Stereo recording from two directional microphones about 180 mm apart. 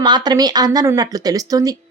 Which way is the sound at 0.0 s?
25° right (ahead or behind).